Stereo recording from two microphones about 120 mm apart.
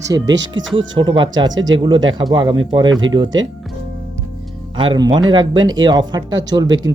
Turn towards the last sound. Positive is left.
turn(degrees=-35)  # may be behind; listen again after turning